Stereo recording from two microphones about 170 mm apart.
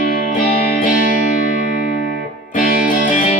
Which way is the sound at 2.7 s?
55° left (ahead or behind).